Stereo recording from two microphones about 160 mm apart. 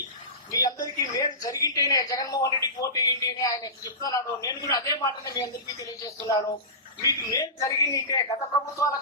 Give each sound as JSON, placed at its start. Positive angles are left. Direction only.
{"t": 0.5, "sound": "a woman's voice", "side_deg": 20}